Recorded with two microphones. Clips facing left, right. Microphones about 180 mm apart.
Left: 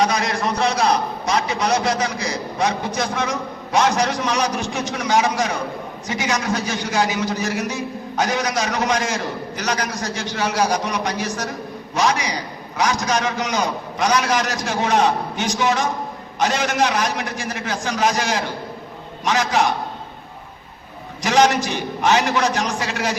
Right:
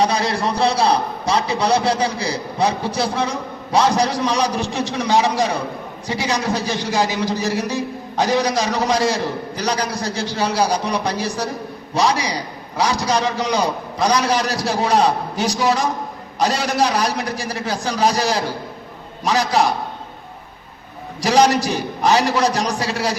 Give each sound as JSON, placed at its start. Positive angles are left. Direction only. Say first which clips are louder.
{"t": 0.0, "sound": "a man's voice", "louder": "right 1 dB", "side_deg": -30}
{"t": 21.2, "sound": "a man's voice", "louder": "right 2 dB", "side_deg": -35}